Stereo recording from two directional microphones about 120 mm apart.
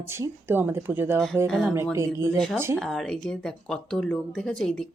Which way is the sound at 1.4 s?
5° left (ahead or behind).